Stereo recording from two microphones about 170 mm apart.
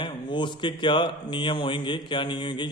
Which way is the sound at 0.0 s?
30° left (ahead or behind).